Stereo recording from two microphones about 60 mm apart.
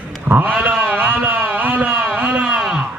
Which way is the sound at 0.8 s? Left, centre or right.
Right.